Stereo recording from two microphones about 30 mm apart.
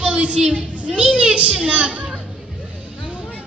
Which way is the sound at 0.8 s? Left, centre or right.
Right.